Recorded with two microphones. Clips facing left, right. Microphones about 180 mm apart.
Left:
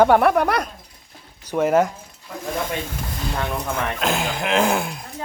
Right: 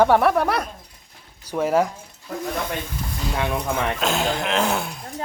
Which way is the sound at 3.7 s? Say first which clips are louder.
Left 2 dB; 5° left (ahead or behind).